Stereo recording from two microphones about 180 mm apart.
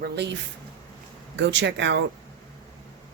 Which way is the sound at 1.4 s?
75° right (ahead or behind).